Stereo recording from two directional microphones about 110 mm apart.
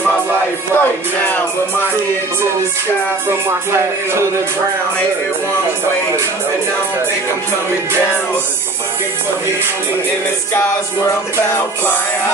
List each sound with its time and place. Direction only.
0.7 s music: 15° left (ahead or behind)
3.4 s music: 25° right (ahead or behind)
10.5 s music: 20° left (ahead or behind)